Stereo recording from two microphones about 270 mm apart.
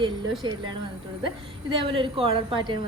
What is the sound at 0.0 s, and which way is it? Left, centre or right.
Speech, centre.